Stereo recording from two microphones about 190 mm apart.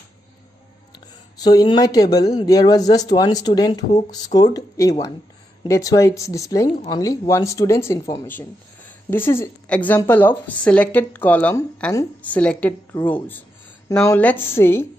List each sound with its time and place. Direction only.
1.4 s speech: 20° left (ahead or behind)